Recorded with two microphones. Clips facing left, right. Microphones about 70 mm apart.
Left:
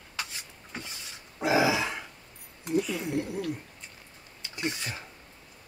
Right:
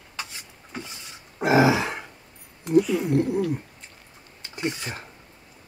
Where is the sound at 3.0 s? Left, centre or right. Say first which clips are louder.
Right 8 dB; right.